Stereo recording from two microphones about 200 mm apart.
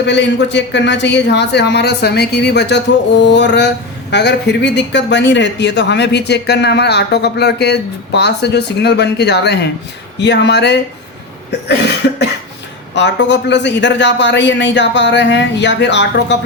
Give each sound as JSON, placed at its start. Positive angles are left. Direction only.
{"t": 0.0, "sound": "speech", "side_deg": 60}
{"t": 12.0, "sound": "speech", "side_deg": 55}